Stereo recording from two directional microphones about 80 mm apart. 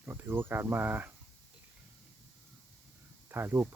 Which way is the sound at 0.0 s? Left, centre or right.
Right.